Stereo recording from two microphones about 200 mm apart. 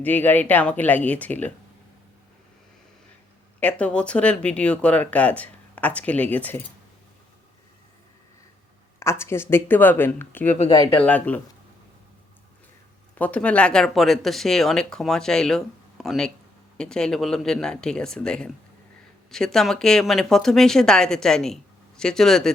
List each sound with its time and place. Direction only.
0.0 s speech: 10° left (ahead or behind)
3.6 s speech: 5° left (ahead or behind)
9.0 s speech: 15° left (ahead or behind)
10.7 s speech: 20° left (ahead or behind)
11.0 s speech: 10° left (ahead or behind)
13.1 s speech: 5° left (ahead or behind)